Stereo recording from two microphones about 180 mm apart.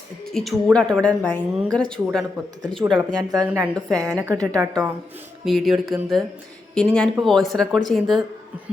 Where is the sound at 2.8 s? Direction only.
20° right (ahead or behind).